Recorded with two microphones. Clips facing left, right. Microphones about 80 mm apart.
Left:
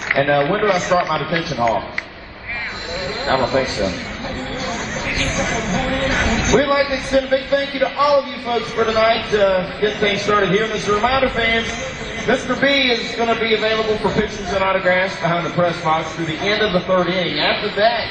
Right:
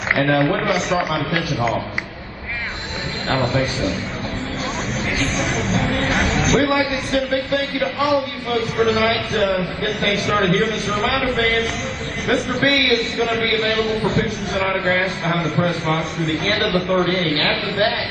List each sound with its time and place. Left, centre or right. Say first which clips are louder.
0.1 s speech: left 1 dB; centre
3.3 s a man's voice: left 3 dB; centre
5.2 s speech: left 2 dB; centre
7.3 s a man's voice: left 3 dB; centre
8.7 s speech: left 3 dB; centre
13.6 s a man's voice: left 2 dB; centre
14.2 s speech: left 2 dB; centre
14.7 s a man's voice: left 4 dB; centre
15.2 s speech: left 2 dB; centre
17.0 s a man's voice: left 1 dB; left